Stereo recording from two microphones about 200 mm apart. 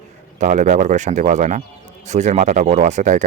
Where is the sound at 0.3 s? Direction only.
35° right (ahead or behind).